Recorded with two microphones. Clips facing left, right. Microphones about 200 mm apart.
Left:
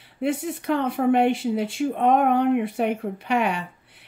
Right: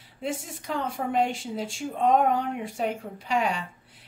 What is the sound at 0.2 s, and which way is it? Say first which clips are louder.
Speech: left 8 dB; 60° left (ahead or behind).